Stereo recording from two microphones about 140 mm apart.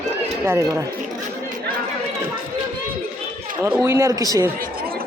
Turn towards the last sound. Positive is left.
turn(degrees=-20)  # may be behind; listen again after turning